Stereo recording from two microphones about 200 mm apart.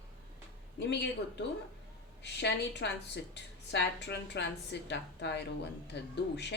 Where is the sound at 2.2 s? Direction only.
60° left (ahead or behind).